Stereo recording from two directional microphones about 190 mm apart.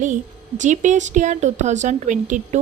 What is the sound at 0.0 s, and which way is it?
A woman's voice, 40° right (ahead or behind).